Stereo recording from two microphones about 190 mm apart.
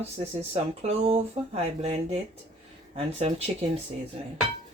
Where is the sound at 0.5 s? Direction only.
30° right (ahead or behind).